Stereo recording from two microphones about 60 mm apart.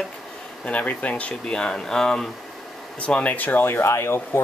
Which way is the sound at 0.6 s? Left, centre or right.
Left.